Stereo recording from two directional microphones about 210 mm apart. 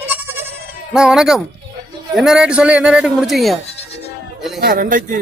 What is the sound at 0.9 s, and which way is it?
Speech, 5° right (ahead or behind).